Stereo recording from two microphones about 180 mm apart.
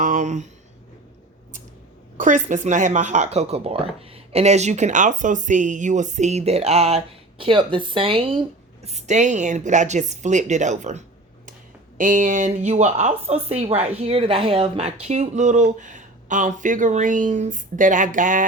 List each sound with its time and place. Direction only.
0.0 s speech: 45° right (ahead or behind)
2.1 s speech: 45° right (ahead or behind)